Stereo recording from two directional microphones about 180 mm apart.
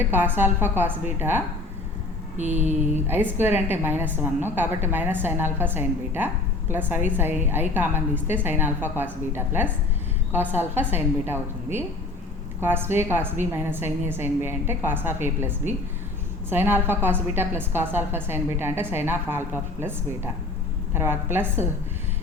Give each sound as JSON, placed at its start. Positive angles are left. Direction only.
{"t": 0.0, "sound": "a woman's voice", "side_deg": -10}
{"t": 2.4, "sound": "a sound", "side_deg": -40}
{"t": 3.1, "sound": "a woman's voice", "side_deg": -10}